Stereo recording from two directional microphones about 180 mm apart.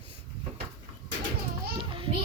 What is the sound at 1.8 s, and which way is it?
Music, 30° right (ahead or behind).